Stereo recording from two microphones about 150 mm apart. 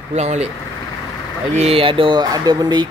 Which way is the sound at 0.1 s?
45° right (ahead or behind).